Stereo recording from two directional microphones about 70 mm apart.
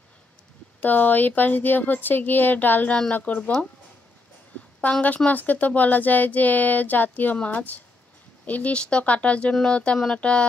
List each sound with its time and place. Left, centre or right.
0.7 s speech: left
5.0 s speech: left